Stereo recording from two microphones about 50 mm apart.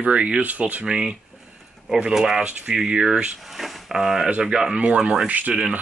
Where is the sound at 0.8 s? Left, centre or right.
Centre.